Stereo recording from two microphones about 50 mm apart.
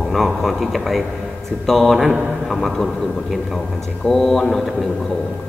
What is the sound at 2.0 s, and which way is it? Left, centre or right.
Speech, centre.